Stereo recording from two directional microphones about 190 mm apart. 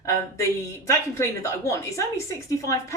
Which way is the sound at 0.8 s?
15° left (ahead or behind).